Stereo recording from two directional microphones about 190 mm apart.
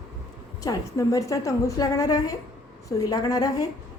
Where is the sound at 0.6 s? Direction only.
15° left (ahead or behind).